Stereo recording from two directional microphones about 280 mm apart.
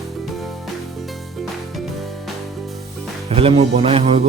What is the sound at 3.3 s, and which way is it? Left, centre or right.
Speech, centre.